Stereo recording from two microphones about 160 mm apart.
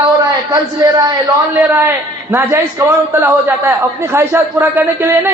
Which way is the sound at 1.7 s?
10° right (ahead or behind).